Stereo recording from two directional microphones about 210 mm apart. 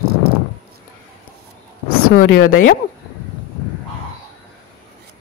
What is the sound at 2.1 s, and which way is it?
Speech, 80° left.